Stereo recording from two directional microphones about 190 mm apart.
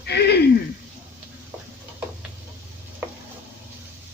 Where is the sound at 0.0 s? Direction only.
60° left (ahead or behind).